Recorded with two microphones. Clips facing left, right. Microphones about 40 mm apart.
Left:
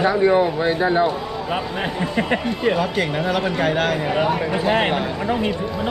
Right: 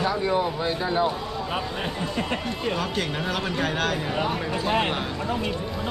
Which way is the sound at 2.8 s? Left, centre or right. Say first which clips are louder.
Left 6 dB; centre.